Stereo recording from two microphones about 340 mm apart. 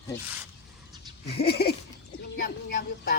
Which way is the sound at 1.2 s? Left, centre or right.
Left.